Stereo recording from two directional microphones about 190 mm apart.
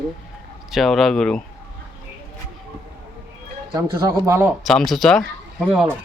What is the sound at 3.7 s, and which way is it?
Speech, 20° right (ahead or behind).